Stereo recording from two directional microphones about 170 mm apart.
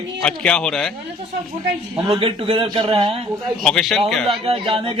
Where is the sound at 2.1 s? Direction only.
30° right (ahead or behind).